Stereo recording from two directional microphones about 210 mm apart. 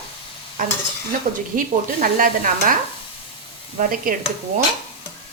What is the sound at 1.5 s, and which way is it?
Stir, 40° right (ahead or behind).